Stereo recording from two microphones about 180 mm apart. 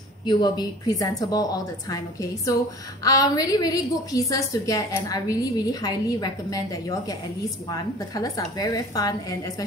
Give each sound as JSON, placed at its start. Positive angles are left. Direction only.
{"t": 0.2, "sound": "a woman's voice", "side_deg": 25}
{"t": 3.0, "sound": "a woman's voice", "side_deg": 20}